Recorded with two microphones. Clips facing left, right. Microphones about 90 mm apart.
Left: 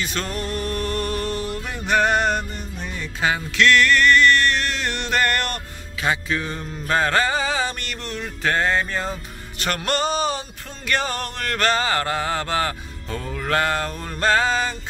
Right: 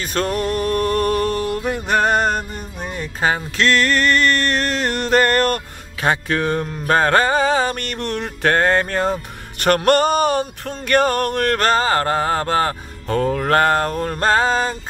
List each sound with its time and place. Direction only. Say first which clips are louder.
0.0 s a sound: right 6 dB; 45° right (ahead or behind)
3.0 s music: right 3 dB; 40° right (ahead or behind)
6.0 s music: right 5 dB; 55° right (ahead or behind); by 12.7 s 40° right (ahead or behind)
13.1 s music: right 7 dB; 55° right (ahead or behind); by 14.8 s 40° right (ahead or behind)